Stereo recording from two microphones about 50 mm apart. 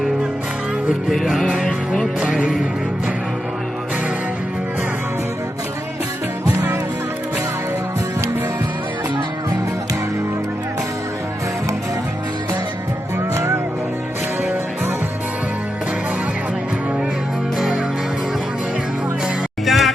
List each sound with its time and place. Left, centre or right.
1.1 s music: centre
1.6 s music: centre
19.6 s music: centre